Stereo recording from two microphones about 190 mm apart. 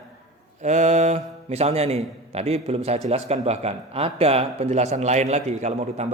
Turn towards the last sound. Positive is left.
turn(degrees=-35)  # may be behind; listen again after turning